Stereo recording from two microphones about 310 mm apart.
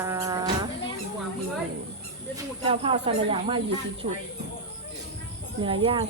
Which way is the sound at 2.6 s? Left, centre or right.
Centre.